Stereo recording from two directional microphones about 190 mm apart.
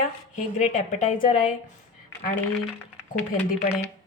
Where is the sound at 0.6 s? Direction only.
40° left (ahead or behind).